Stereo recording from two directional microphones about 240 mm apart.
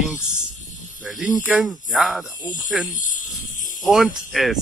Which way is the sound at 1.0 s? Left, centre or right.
Centre.